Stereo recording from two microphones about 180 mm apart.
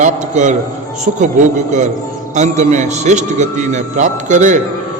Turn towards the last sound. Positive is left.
turn(degrees=-45)  # may be behind; listen again after turning